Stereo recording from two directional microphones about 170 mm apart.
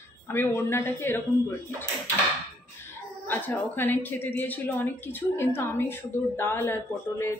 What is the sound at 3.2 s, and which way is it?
Speech, 10° left (ahead or behind).